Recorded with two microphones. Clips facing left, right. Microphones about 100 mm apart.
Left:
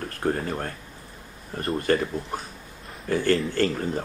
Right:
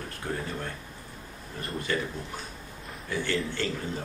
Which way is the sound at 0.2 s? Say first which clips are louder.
Left 8 dB; 50° left (ahead or behind).